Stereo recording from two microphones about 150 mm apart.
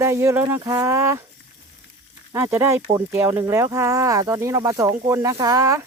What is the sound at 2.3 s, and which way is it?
Speech, 15° right (ahead or behind).